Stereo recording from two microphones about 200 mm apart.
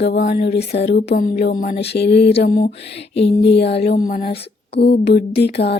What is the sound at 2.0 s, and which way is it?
Music, 55° left (ahead or behind).